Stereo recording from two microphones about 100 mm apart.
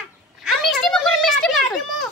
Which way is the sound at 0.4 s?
Centre (ahead or behind).